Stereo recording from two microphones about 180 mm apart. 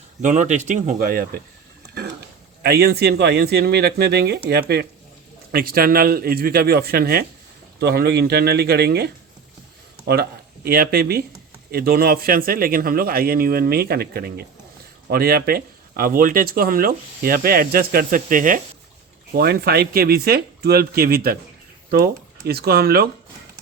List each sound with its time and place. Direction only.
0.2 s speech: 40° right (ahead or behind)
2.6 s speech: 60° right (ahead or behind)
10.1 s speech: 60° right (ahead or behind)
19.3 s speech: 60° right (ahead or behind)